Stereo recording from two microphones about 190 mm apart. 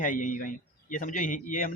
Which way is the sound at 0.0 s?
45° left (ahead or behind).